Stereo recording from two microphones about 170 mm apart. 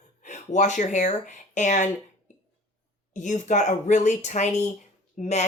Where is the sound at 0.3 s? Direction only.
45° left (ahead or behind).